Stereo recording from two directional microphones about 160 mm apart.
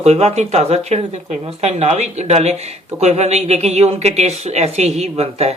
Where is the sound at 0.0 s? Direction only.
40° right (ahead or behind).